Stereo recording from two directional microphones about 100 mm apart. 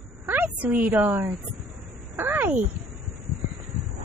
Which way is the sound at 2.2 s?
20° right (ahead or behind).